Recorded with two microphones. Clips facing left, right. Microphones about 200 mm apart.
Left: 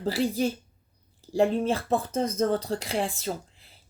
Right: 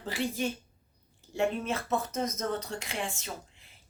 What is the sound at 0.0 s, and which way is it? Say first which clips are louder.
Speech: left 6 dB; 35° left (ahead or behind).